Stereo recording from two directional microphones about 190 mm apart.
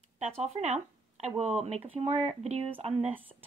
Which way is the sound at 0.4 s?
35° right (ahead or behind).